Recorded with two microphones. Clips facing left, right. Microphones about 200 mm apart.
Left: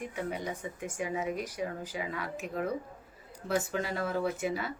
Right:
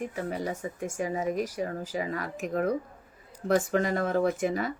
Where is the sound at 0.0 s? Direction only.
40° right (ahead or behind).